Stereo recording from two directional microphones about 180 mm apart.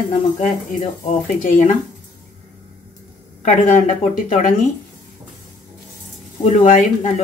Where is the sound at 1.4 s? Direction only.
45° left (ahead or behind).